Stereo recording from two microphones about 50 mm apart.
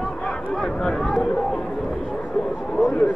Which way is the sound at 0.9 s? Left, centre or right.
Centre.